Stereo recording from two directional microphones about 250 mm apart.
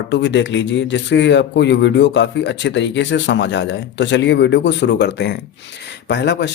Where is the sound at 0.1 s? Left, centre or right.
Left.